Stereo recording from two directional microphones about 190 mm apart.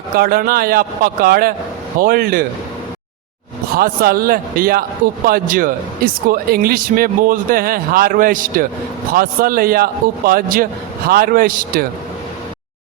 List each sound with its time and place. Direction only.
0.2 s speech: 50° right (ahead or behind)
3.8 s speech: 50° right (ahead or behind)